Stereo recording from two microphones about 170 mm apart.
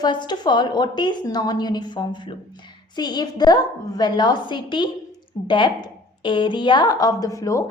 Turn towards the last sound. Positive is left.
turn(degrees=20)  # may be behind; listen again after turning